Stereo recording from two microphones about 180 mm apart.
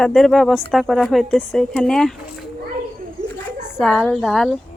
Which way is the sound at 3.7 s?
Centre (ahead or behind).